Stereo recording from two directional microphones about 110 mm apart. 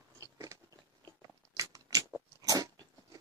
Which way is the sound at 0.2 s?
30° right (ahead or behind).